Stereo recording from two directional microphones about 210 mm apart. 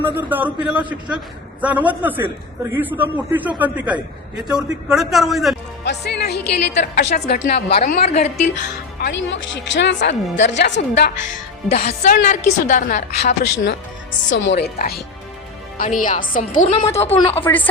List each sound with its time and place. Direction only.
0.0 s a man's voice: 10° right (ahead or behind)
5.8 s speech: 55° left (ahead or behind)
7.8 s a woman's voice: 35° left (ahead or behind)
9.0 s speech: 55° left (ahead or behind)
11.7 s a woman's voice: 30° left (ahead or behind)
14.3 s a woman's voice: 60° left (ahead or behind); by 17.2 s 30° left (ahead or behind)
17.2 s speech: 10° left (ahead or behind)